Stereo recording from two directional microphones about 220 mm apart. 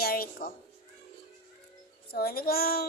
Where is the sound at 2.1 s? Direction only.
45° left (ahead or behind).